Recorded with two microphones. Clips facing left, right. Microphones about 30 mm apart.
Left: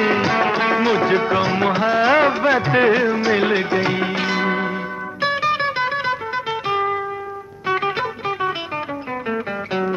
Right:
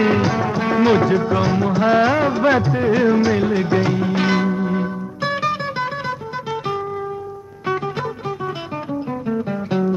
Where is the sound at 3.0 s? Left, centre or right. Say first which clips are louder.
Right 3 dB; centre.